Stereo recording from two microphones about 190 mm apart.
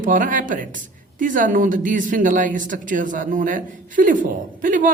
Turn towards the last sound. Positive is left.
turn(degrees=-45)  # may be behind; listen again after turning